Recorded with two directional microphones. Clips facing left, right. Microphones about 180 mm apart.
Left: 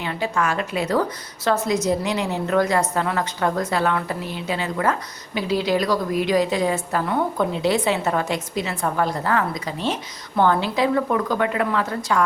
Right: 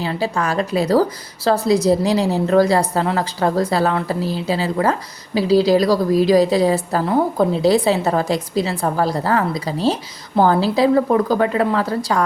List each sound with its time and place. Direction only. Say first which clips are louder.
0.0 s a woman's voice: right 3 dB; 35° right (ahead or behind)